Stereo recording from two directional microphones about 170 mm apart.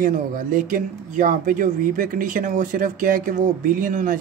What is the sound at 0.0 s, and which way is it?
Speech, 50° right (ahead or behind).